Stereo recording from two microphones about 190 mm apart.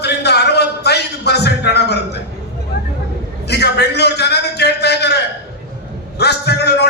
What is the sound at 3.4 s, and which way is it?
A man's voice, 60° left (ahead or behind).